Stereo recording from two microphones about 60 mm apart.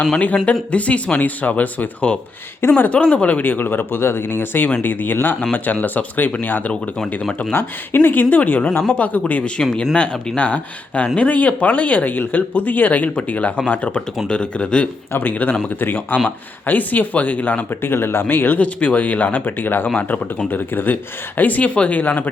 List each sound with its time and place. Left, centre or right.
0.7 s speech: left
2.6 s speech: left
2.9 s speech: centre
15.2 s speech: left
17.9 s speech: left
18.6 s speech: left